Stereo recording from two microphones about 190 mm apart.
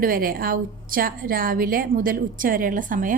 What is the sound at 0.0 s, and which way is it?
A woman's voice, 50° right (ahead or behind).